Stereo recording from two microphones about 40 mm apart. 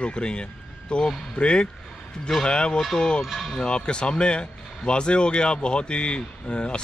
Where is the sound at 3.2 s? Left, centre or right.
Centre.